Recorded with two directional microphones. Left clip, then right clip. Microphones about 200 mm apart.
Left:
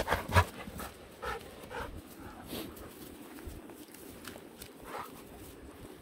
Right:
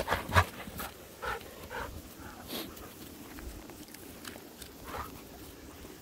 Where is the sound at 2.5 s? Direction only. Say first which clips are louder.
Right 2 dB; 5° left (ahead or behind).